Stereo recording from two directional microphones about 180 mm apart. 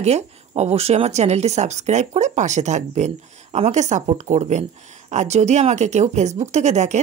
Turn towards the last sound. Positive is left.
turn(degrees=-40)  # may be behind; listen again after turning